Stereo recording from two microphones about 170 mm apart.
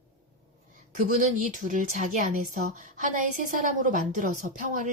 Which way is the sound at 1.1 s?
50° right (ahead or behind).